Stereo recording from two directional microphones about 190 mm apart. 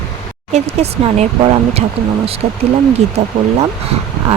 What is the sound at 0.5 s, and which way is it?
Speech, 35° right (ahead or behind).